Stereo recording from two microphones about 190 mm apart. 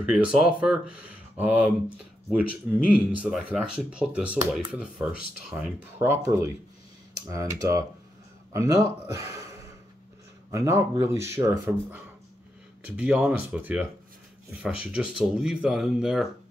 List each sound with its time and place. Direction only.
0.0 s speech: 5° right (ahead or behind)
7.2 s speech: 15° right (ahead or behind)
10.5 s speech: 15° right (ahead or behind)